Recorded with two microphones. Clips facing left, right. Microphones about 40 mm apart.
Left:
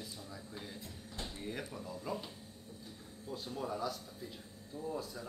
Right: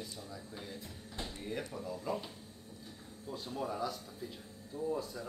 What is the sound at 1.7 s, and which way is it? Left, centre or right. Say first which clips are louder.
Speech: right 3 dB; centre.